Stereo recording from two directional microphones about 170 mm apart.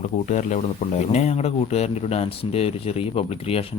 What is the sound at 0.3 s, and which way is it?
Speech, 45° left (ahead or behind).